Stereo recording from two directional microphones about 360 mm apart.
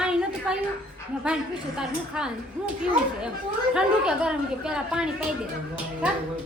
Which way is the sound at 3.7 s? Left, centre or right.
Centre.